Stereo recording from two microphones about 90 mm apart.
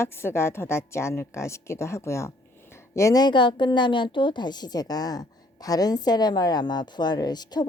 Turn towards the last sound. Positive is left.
turn(degrees=50)  # may be behind; listen again after turning